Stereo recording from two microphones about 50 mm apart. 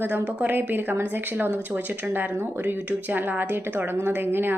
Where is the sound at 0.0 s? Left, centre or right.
Right.